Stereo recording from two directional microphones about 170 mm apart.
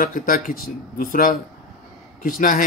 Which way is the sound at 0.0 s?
55° left (ahead or behind).